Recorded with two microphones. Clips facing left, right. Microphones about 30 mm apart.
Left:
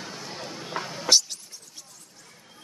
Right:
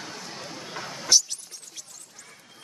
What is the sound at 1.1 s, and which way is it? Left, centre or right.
Vehicle, left.